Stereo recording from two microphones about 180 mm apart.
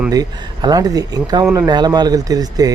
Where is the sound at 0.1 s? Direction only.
20° right (ahead or behind).